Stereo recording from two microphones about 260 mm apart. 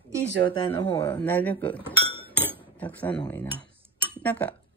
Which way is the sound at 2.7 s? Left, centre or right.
Centre.